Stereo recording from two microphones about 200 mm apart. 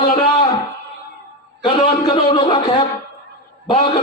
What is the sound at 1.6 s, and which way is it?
A man's voice, 25° left (ahead or behind).